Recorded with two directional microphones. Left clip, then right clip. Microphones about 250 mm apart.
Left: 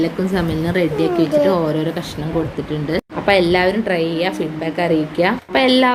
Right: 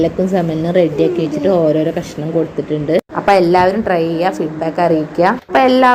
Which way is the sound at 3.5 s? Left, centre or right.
Centre.